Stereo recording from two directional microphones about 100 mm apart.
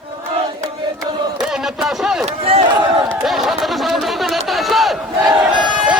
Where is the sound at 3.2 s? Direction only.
Centre (ahead or behind).